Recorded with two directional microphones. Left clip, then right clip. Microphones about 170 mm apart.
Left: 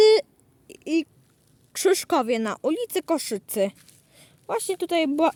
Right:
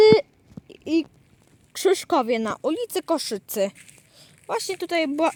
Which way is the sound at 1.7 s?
10° left (ahead or behind).